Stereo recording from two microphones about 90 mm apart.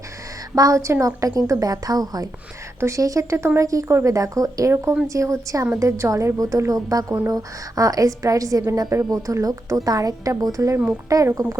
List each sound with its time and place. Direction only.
0.5 s speech: 40° right (ahead or behind)